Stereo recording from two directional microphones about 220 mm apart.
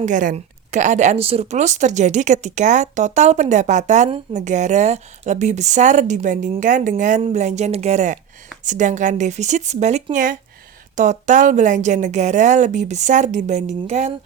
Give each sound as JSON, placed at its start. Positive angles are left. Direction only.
{"t": 0.0, "sound": "a woman's voice", "side_deg": -35}